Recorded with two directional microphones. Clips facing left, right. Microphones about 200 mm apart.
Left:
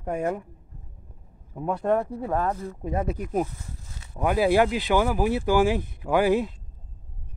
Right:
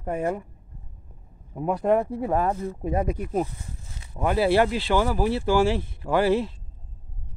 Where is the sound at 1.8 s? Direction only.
15° right (ahead or behind).